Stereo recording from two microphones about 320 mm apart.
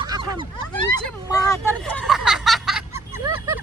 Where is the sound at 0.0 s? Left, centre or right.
Centre.